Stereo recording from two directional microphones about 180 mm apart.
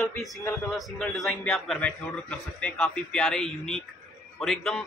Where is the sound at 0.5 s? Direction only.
Centre (ahead or behind).